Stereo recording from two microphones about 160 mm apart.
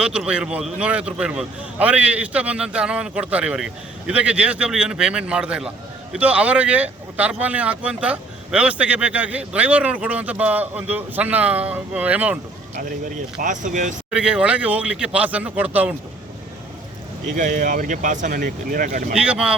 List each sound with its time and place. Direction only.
0.0 s speech: 5° right (ahead or behind)
13.4 s speech: 55° right (ahead or behind)
14.1 s speech: 5° right (ahead or behind)
17.3 s speech: 55° right (ahead or behind)
19.1 s speech: 5° right (ahead or behind)